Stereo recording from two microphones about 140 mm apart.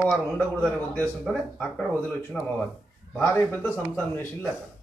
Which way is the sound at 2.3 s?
Centre (ahead or behind).